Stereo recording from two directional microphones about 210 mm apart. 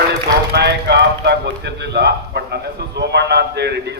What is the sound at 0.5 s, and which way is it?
A man's voice, 55° right (ahead or behind).